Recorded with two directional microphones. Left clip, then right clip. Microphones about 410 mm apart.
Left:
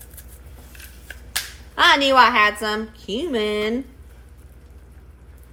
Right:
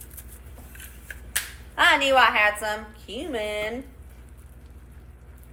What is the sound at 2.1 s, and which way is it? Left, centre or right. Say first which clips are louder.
Speech: left 4 dB; left.